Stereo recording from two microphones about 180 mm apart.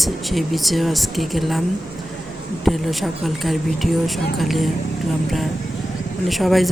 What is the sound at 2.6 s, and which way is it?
A woman's voice, centre (ahead or behind).